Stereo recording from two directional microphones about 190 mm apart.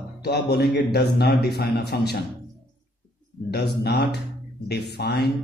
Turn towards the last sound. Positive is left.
turn(degrees=60)  # may be behind; listen again after turning